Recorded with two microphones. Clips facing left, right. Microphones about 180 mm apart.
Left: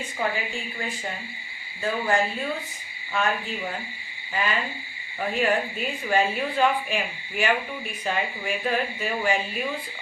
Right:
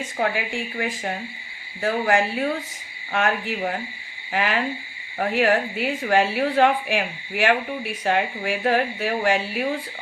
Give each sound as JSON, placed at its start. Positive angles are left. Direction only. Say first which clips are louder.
{"t": 0.2, "sound": "speech", "louder": "right 4 dB", "side_deg": -75}
{"t": 1.8, "sound": "speech", "louder": "right 3 dB", "side_deg": -70}